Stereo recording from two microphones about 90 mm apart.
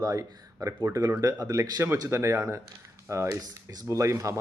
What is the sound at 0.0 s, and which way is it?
Speech, 40° right (ahead or behind).